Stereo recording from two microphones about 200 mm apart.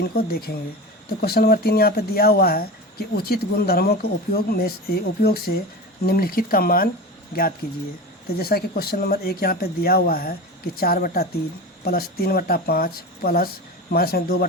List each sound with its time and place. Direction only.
0.2 s speech: 50° left (ahead or behind)